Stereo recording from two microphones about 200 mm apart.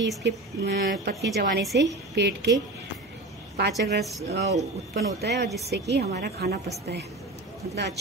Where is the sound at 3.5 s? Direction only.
55° right (ahead or behind).